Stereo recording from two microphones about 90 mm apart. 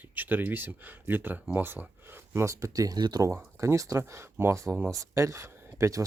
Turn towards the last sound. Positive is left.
turn(degrees=-35)  # may be behind; listen again after turning